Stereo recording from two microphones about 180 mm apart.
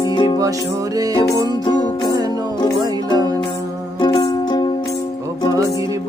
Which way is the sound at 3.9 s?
25° left (ahead or behind).